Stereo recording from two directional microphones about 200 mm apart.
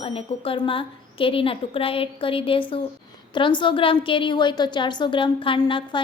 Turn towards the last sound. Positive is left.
turn(degrees=20)  # may be behind; listen again after turning